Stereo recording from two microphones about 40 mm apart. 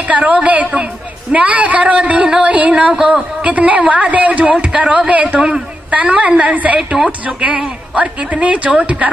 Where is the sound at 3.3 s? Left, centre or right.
Right.